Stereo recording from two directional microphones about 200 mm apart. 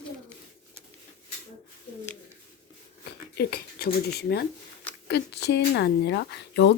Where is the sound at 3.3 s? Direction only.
50° left (ahead or behind).